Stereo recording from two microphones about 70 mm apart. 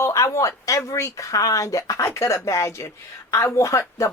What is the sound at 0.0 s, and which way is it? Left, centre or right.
Speech, left.